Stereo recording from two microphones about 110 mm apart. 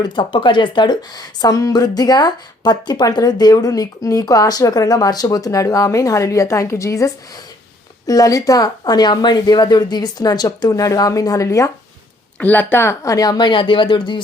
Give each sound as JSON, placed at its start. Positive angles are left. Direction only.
{"t": 0.0, "sound": "speech", "side_deg": 45}
{"t": 12.4, "sound": "speech", "side_deg": 15}